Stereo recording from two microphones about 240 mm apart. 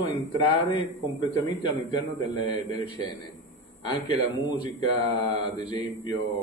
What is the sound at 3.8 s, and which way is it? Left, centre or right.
Speech, centre.